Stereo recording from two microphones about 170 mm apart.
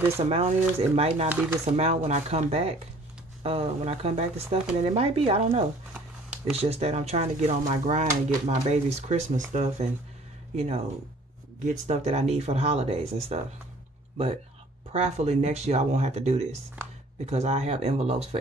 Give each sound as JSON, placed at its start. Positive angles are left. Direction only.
{"t": 0.3, "sound": "speech", "side_deg": -35}
{"t": 1.3, "sound": "speech", "side_deg": -10}
{"t": 1.6, "sound": "speech", "side_deg": -40}
{"t": 5.9, "sound": "a sound", "side_deg": -5}
{"t": 6.5, "sound": "speech", "side_deg": -35}
{"t": 14.9, "sound": "speech", "side_deg": -40}